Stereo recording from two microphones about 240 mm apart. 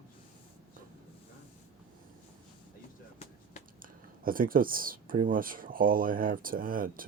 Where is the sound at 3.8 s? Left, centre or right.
Right.